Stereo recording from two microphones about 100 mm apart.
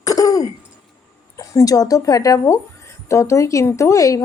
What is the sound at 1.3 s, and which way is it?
Speech, 35° left (ahead or behind).